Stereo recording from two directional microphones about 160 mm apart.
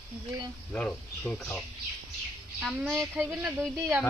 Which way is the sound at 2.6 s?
10° right (ahead or behind).